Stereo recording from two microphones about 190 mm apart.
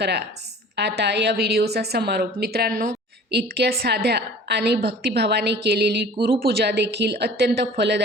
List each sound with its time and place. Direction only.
0.0 s a woman's voice: 60° right (ahead or behind)